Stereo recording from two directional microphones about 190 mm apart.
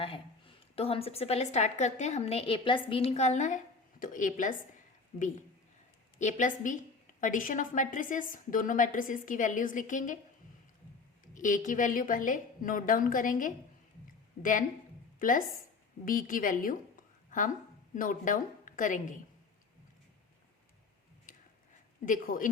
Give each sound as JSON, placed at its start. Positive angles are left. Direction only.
{"t": 0.0, "sound": "a woman's voice", "side_deg": 30}
{"t": 6.1, "sound": "a woman's voice", "side_deg": 40}
{"t": 11.3, "sound": "a woman's voice", "side_deg": 40}
{"t": 15.2, "sound": "a woman's voice", "side_deg": 45}
{"t": 17.9, "sound": "a woman's voice", "side_deg": 45}
{"t": 21.3, "sound": "a sound", "side_deg": 45}
{"t": 22.0, "sound": "a woman's voice", "side_deg": 45}